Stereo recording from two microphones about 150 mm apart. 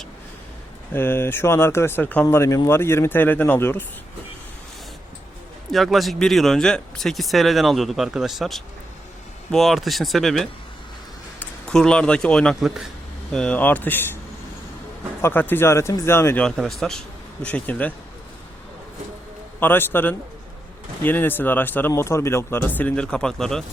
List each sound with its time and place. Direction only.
0.9 s speech: 15° left (ahead or behind)
5.7 s a man's voice: centre (ahead or behind)
15.2 s speech: 15° left (ahead or behind)
19.5 s speech: 15° left (ahead or behind)